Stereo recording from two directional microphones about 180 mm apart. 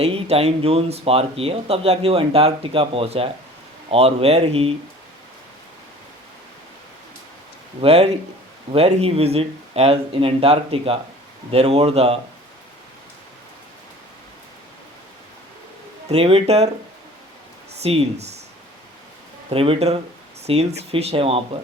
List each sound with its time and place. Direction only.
0.0 s speech: 35° right (ahead or behind)
7.8 s speech: 35° right (ahead or behind)
16.0 s speech: 35° right (ahead or behind)
17.8 s speech: 35° right (ahead or behind)
19.5 s speech: 30° right (ahead or behind)